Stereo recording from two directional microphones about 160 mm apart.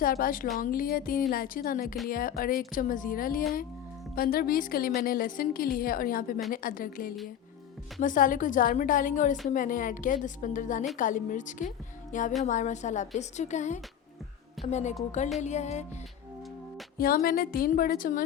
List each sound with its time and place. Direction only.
0.0 s a woman's voice: 65° left (ahead or behind); by 15.9 s 45° left (ahead or behind)
17.0 s a woman's voice: 70° left (ahead or behind)